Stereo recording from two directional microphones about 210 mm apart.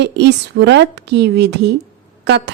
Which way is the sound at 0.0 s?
55° right (ahead or behind).